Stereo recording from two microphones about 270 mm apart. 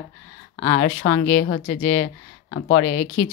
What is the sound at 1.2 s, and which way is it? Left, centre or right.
Speech, left.